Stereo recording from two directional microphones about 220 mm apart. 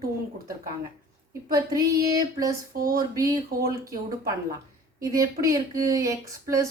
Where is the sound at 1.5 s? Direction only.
15° right (ahead or behind).